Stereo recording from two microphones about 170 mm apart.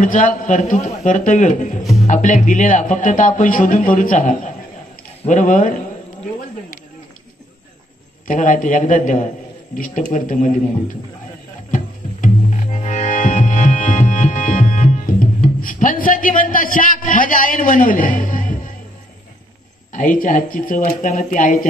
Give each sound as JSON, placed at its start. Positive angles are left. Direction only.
{"t": 0.0, "sound": "a man's voice", "side_deg": 50}
{"t": 8.3, "sound": "a man's voice", "side_deg": 50}
{"t": 11.7, "sound": "music", "side_deg": 50}
{"t": 19.9, "sound": "a man's voice", "side_deg": 55}